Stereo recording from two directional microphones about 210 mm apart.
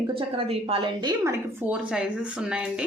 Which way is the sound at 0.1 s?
25° right (ahead or behind).